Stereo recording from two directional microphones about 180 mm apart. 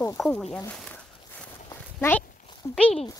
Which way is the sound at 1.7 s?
10° left (ahead or behind).